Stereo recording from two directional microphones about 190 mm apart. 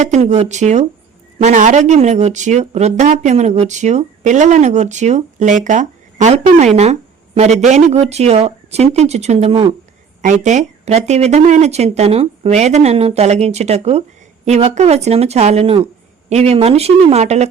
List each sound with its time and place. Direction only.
0.0 s speech: 40° right (ahead or behind)
10.4 s speech: 40° right (ahead or behind)